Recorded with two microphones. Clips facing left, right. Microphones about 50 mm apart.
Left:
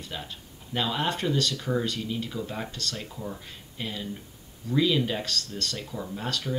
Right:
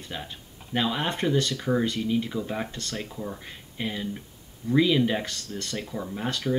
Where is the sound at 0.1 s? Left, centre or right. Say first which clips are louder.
Right 2 dB; centre.